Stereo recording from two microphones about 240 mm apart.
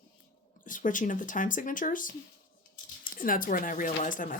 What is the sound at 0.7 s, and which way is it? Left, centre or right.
Speech, left.